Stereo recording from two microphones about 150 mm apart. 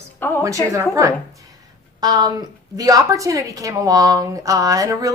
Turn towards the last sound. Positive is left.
turn(degrees=-20)  # may be behind; listen again after turning